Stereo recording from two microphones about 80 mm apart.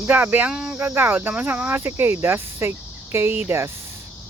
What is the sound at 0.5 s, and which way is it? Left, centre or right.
Cricket, centre.